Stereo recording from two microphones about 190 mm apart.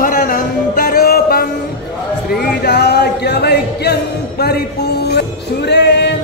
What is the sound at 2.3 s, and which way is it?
Speech, 55° left (ahead or behind).